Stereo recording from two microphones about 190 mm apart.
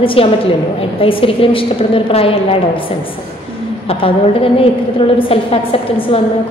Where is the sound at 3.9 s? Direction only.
30° left (ahead or behind).